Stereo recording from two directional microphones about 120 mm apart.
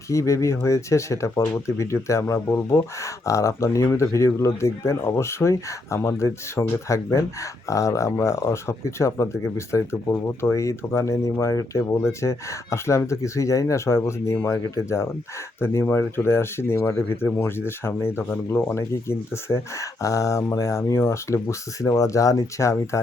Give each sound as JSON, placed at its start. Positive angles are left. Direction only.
{"t": 0.1, "sound": "speech", "side_deg": 25}